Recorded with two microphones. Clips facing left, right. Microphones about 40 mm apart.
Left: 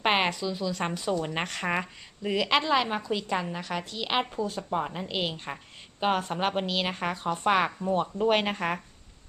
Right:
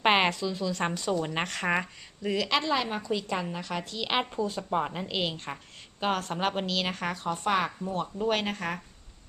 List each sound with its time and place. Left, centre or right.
0.0 s a woman's voice: centre
2.3 s a woman's voice: centre
6.0 s a woman's voice: centre
7.3 s speech: left